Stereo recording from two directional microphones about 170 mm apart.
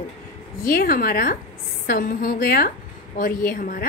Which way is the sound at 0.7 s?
60° left (ahead or behind).